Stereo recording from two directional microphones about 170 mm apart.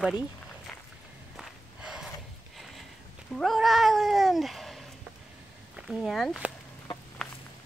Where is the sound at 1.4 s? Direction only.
5° right (ahead or behind).